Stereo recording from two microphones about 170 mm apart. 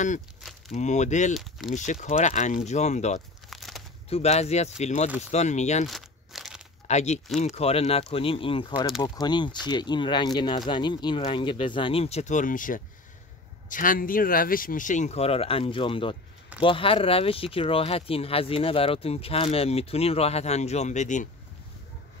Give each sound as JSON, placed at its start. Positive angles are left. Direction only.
{"t": 0.7, "sound": "speech", "side_deg": 45}
{"t": 1.3, "sound": "speech", "side_deg": 0}
{"t": 1.7, "sound": "speech", "side_deg": 45}
{"t": 3.4, "sound": "a sound", "side_deg": 0}
{"t": 4.1, "sound": "speech", "side_deg": 40}
{"t": 5.9, "sound": "crumpling", "side_deg": 0}
{"t": 6.9, "sound": "speech", "side_deg": 40}